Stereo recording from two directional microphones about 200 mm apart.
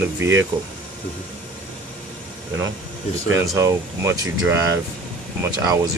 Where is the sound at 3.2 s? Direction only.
15° right (ahead or behind).